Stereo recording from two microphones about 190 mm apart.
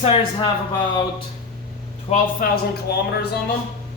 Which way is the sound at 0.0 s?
30° left (ahead or behind).